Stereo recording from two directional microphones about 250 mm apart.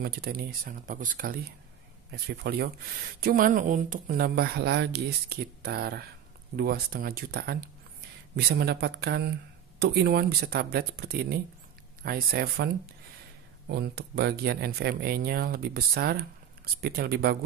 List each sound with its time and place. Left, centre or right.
0.0 s speech: right
13.7 s speech: right